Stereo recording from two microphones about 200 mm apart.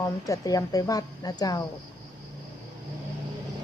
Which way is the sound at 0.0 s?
15° left (ahead or behind).